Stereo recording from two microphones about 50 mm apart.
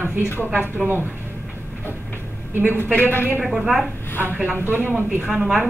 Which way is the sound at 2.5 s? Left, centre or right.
Right.